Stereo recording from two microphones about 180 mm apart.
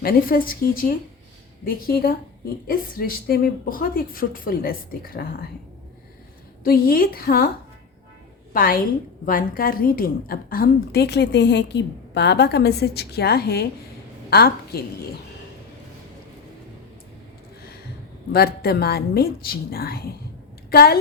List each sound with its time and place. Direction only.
0.0 s a woman's voice: 55° left (ahead or behind)
6.7 s a woman's voice: 55° left (ahead or behind)
8.5 s a woman's voice: 50° left (ahead or behind)
18.3 s a woman's voice: 60° left (ahead or behind)